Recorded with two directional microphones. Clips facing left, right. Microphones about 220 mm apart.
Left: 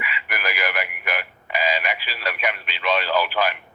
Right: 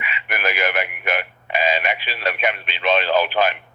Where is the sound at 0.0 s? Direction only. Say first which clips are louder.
Right 4 dB; 25° right (ahead or behind).